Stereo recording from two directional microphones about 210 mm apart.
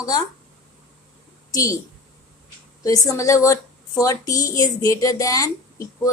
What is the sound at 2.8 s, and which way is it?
A woman's voice, 15° left (ahead or behind).